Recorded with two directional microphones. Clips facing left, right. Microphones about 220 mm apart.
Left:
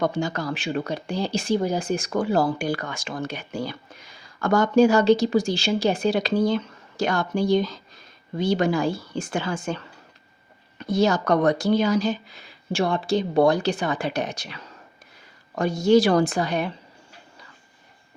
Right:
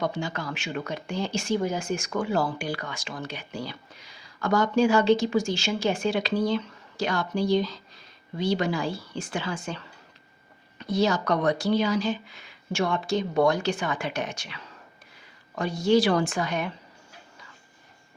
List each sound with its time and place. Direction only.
0.0 s speech: 45° left (ahead or behind)